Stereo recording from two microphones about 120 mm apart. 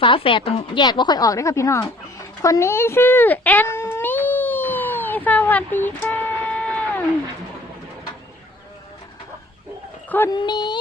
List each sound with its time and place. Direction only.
0.0 s speech: 45° left (ahead or behind)
0.8 s speech: 35° left (ahead or behind); by 7.0 s 10° left (ahead or behind)
10.3 s speech: 40° left (ahead or behind)